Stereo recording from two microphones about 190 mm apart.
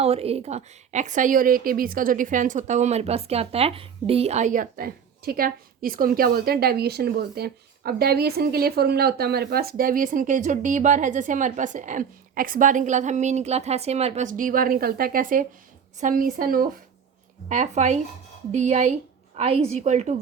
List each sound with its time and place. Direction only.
0.0 s a woman's voice: 30° right (ahead or behind)